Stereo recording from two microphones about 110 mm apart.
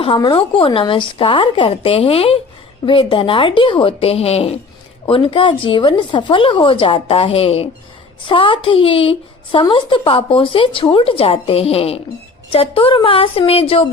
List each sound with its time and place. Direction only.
0.2 s a woman's voice: 50° left (ahead or behind)
2.8 s a woman's voice: 50° left (ahead or behind)